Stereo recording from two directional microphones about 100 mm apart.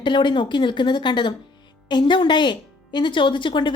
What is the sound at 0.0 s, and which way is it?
Speech, 50° left (ahead or behind).